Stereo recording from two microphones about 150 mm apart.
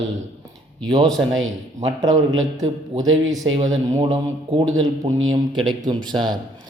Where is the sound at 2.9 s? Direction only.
40° right (ahead or behind).